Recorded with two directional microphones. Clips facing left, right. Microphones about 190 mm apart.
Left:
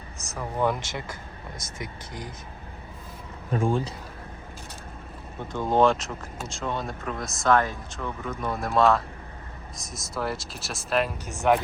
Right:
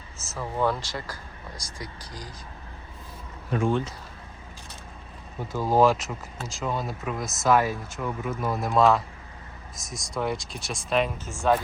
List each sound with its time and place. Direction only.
0.2 s speech: 15° left (ahead or behind)
5.5 s speech: 5° right (ahead or behind)
11.3 s speech: 15° left (ahead or behind)